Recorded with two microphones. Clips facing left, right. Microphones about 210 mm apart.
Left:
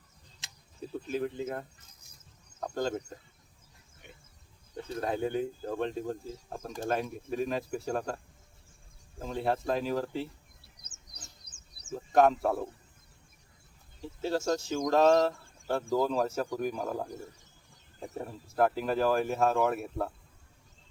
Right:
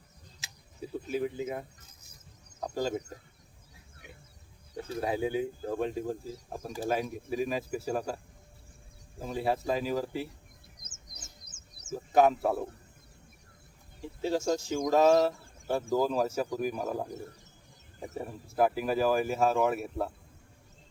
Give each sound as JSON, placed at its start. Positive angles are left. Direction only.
{"t": 0.4, "sound": "a sound", "side_deg": -10}
{"t": 1.1, "sound": "speech", "side_deg": -10}
{"t": 2.7, "sound": "speech", "side_deg": -5}
{"t": 4.9, "sound": "speech", "side_deg": -5}
{"t": 10.8, "sound": "bird", "side_deg": 35}
{"t": 11.9, "sound": "speech", "side_deg": -5}
{"t": 14.2, "sound": "speech", "side_deg": -10}